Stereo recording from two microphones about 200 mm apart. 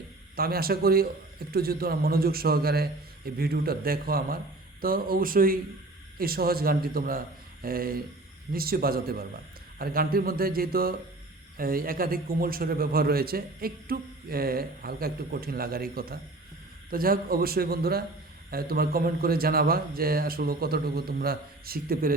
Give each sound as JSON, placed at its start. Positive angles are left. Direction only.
{"t": 0.3, "sound": "a man's voice", "side_deg": -50}